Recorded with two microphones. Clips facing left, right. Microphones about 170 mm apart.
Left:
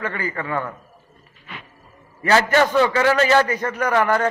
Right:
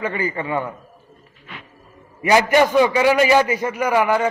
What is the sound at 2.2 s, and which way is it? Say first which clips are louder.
A man's voice: right 2 dB; 15° right (ahead or behind).